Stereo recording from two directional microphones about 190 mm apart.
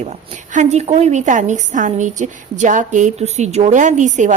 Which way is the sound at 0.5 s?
35° right (ahead or behind).